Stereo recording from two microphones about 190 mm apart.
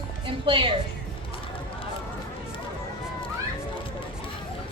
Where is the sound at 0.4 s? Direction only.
25° right (ahead or behind).